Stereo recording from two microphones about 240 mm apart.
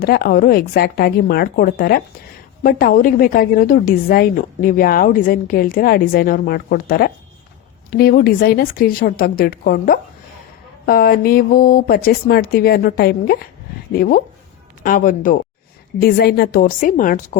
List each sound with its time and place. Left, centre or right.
0.0 s a woman's voice: left
14.8 s a woman's voice: left